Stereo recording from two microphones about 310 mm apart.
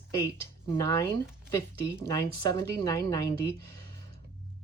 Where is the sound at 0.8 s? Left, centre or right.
Centre.